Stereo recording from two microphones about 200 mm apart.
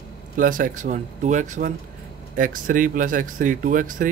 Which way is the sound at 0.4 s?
45° right (ahead or behind).